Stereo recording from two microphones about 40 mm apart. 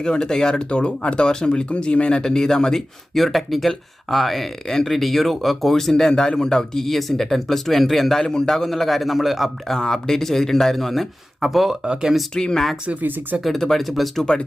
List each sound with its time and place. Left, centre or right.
0.0 s speech: centre
2.2 s speech: centre
8.2 s a man's voice: centre
9.6 s speech: centre
11.3 s speech: centre
12.3 s speech: centre
13.0 s speech: right
13.4 s a man's voice: centre
14.2 s speech: centre